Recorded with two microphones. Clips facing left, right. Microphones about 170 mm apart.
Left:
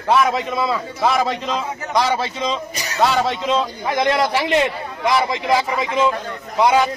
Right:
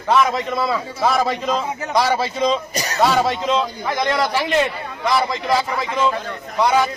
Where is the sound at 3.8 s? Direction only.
20° left (ahead or behind).